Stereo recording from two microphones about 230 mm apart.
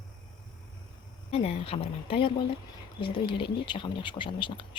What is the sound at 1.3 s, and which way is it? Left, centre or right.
Speech, left.